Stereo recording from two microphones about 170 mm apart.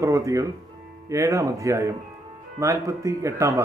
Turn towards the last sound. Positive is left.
turn(degrees=-20)  # may be behind; listen again after turning